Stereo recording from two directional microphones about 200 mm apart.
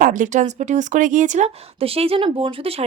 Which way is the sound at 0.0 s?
40° right (ahead or behind).